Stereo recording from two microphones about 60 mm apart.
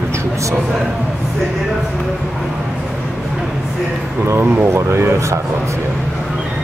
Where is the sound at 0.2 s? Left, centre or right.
Right.